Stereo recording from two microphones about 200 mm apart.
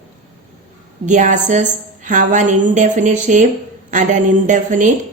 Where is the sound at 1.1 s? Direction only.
40° right (ahead or behind).